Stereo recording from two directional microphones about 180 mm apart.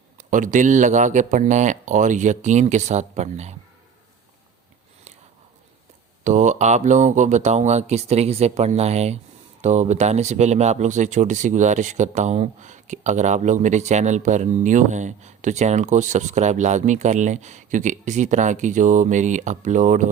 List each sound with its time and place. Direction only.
0.2 s speech: 45° right (ahead or behind)
6.2 s speech: 40° right (ahead or behind)